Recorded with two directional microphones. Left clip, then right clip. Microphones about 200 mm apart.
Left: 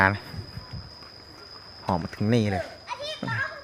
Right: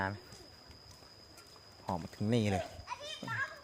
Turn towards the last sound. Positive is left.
turn(degrees=50)  # may be behind; listen again after turning